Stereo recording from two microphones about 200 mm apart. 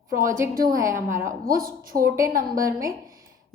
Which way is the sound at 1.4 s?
45° right (ahead or behind).